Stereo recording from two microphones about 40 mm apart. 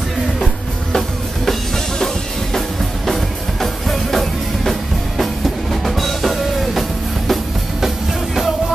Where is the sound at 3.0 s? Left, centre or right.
Centre.